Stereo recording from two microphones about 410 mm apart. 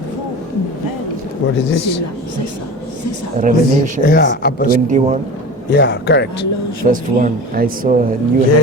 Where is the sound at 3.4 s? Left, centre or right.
Centre.